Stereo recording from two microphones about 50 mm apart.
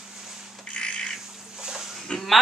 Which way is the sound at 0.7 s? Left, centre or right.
Left.